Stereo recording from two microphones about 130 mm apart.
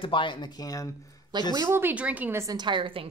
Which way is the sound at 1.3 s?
35° right (ahead or behind).